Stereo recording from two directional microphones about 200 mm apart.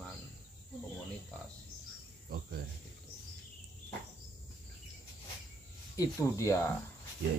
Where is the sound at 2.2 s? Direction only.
50° right (ahead or behind).